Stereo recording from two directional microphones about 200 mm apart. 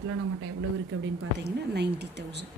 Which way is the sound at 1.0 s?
55° right (ahead or behind).